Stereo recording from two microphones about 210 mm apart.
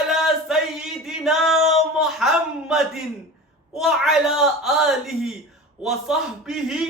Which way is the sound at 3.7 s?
Centre (ahead or behind).